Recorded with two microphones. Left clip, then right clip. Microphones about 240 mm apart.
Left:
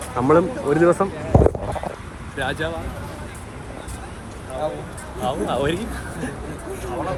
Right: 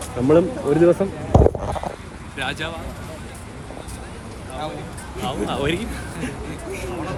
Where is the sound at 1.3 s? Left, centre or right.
Left.